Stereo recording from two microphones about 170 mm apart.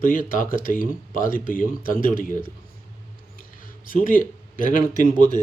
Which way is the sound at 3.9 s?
55° left (ahead or behind).